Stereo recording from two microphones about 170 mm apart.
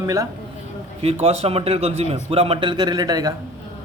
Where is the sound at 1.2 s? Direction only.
35° right (ahead or behind); by 3.3 s 20° right (ahead or behind).